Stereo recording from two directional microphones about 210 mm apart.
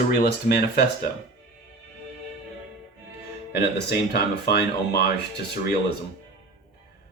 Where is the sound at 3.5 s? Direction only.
50° left (ahead or behind).